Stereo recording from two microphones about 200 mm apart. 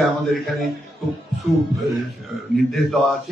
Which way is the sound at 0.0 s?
Centre (ahead or behind).